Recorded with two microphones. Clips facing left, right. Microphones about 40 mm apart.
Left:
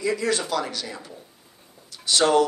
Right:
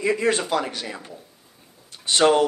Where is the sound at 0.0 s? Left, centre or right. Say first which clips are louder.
Right 3 dB; right.